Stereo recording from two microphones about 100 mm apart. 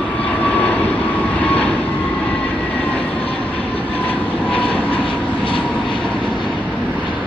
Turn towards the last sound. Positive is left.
turn(degrees=5)  # may be behind; listen again after turning